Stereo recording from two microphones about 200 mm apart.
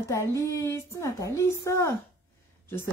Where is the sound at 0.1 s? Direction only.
15° left (ahead or behind).